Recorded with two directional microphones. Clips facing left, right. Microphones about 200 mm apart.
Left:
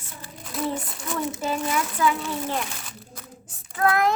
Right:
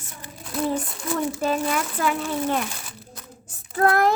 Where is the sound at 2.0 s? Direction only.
60° right (ahead or behind).